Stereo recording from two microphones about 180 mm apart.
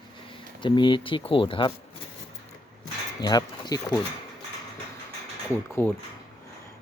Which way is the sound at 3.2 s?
20° left (ahead or behind).